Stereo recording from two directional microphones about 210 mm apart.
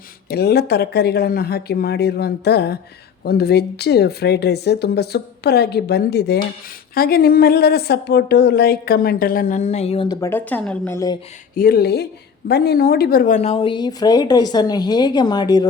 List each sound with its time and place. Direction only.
0.3 s a woman's voice: 50° left (ahead or behind); by 11.2 s 15° left (ahead or behind)
11.5 s a woman's voice: 45° left (ahead or behind); by 15.6 s 20° left (ahead or behind)